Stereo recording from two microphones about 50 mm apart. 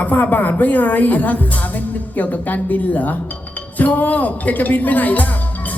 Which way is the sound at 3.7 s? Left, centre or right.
Left.